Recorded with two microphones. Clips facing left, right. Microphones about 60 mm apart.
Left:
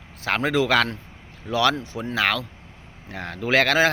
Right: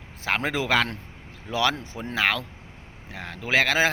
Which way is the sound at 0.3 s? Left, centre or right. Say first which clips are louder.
Left 4 dB; centre.